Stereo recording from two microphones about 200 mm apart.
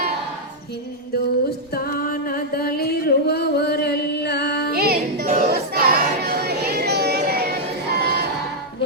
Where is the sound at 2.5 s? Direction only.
50° left (ahead or behind).